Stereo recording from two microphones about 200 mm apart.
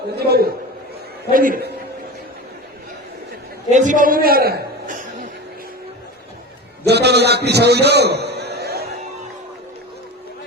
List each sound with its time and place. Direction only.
0.2 s a man's voice: 50° right (ahead or behind)
3.7 s a sound: 40° right (ahead or behind)
6.8 s a man's voice: 55° right (ahead or behind)